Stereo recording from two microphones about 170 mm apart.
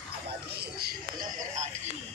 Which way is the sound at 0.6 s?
65° right (ahead or behind).